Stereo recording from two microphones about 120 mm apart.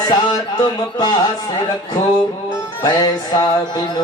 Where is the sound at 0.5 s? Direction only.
35° left (ahead or behind).